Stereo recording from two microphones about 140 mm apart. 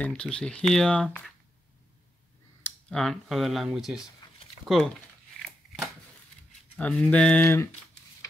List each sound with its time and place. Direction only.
0.0 s speech: 5° left (ahead or behind)
2.9 s speech: centre (ahead or behind)
6.8 s speech: 10° left (ahead or behind)